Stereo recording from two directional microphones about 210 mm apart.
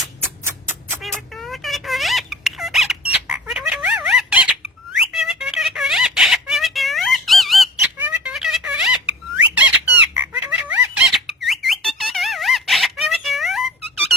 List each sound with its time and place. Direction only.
1.0 s squeak: centre (ahead or behind)
3.1 s squawk: 5° right (ahead or behind)
4.9 s a sound: centre (ahead or behind)